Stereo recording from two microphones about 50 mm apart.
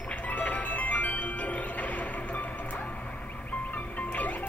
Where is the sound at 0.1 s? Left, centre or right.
Left.